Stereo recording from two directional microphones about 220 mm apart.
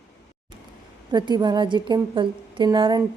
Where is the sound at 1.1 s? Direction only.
20° right (ahead or behind).